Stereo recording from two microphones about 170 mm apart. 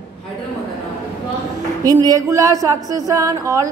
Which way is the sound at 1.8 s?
20° right (ahead or behind).